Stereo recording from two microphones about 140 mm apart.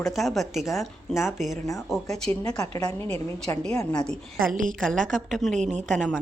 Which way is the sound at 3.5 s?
5° left (ahead or behind).